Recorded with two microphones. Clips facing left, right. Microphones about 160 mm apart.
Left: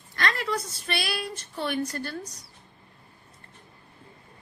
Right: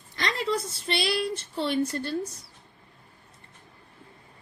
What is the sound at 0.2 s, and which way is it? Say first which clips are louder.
A woman's voice: right 1 dB; 20° right (ahead or behind).